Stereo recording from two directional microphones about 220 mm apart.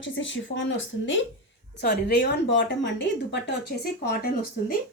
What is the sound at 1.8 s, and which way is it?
Speech, 45° left (ahead or behind).